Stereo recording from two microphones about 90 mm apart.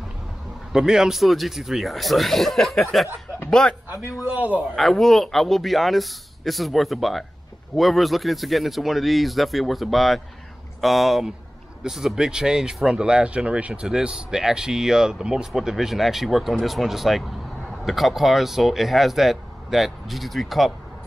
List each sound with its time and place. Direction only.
0.7 s speech: 5° right (ahead or behind)
4.2 s speech: 15° right (ahead or behind)
4.7 s speech: 5° left (ahead or behind)